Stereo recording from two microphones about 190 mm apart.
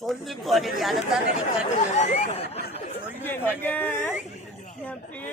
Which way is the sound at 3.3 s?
10° left (ahead or behind).